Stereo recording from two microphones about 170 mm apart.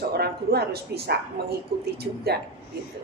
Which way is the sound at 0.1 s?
70° right (ahead or behind).